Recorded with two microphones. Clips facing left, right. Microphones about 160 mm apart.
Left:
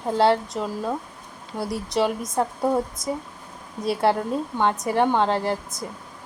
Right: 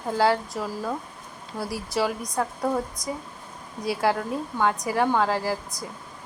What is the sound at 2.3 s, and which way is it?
Speech, 25° left (ahead or behind).